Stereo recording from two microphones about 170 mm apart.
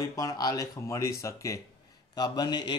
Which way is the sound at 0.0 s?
20° left (ahead or behind).